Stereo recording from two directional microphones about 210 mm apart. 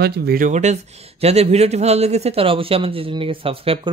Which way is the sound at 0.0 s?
50° right (ahead or behind).